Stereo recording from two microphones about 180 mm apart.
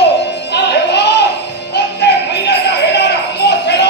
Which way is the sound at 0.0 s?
70° left (ahead or behind).